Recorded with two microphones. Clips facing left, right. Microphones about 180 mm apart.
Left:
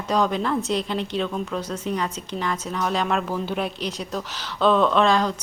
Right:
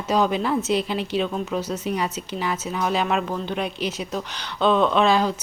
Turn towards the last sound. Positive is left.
turn(degrees=-5)  # may be behind; listen again after turning